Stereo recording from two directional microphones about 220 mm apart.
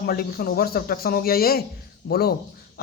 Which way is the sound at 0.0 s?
45° left (ahead or behind).